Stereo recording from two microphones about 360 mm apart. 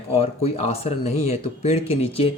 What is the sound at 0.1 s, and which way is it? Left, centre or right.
Speech, centre.